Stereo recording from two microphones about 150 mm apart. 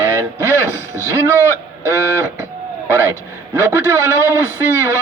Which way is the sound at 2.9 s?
15° right (ahead or behind).